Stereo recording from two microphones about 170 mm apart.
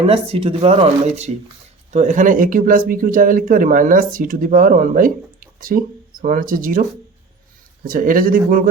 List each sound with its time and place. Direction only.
0.1 s speech: 35° right (ahead or behind); by 6.8 s 55° right (ahead or behind)
7.9 s speech: 55° right (ahead or behind)